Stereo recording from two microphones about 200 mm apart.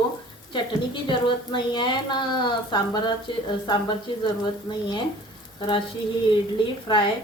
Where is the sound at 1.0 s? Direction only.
20° left (ahead or behind).